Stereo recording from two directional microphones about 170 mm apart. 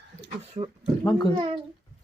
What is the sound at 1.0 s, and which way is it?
Speech, 25° left (ahead or behind).